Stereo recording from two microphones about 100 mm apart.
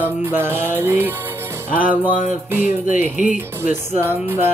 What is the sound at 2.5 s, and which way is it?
Music, 20° right (ahead or behind).